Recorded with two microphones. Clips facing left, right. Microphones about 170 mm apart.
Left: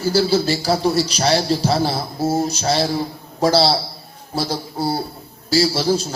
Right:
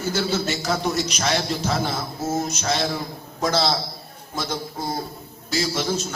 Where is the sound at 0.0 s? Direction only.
35° left (ahead or behind).